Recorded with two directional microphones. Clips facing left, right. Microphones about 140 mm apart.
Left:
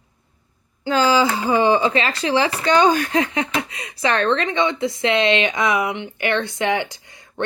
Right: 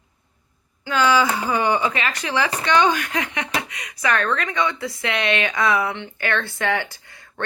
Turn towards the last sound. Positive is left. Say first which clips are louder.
# left 5 dB
turn(degrees=20)  # may be behind; listen again after turning